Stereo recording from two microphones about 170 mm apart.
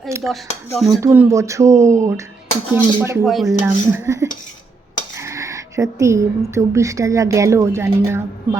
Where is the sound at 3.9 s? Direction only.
15° right (ahead or behind).